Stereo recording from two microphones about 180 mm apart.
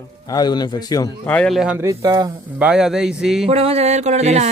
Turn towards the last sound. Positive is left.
turn(degrees=-40)  # may be behind; listen again after turning